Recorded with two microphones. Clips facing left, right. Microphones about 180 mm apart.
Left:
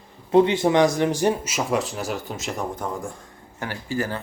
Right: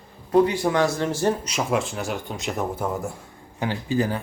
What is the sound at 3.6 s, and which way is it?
Speech, 20° right (ahead or behind).